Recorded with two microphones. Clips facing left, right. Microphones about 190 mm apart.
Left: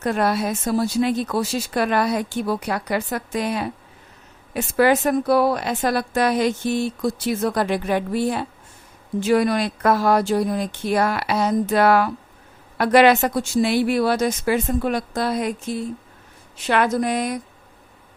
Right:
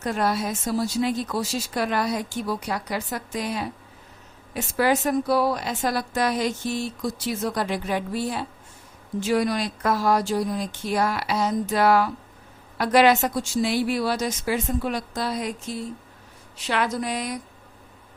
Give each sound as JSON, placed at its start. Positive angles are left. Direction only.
{"t": 0.0, "sound": "a woman's voice", "side_deg": 60}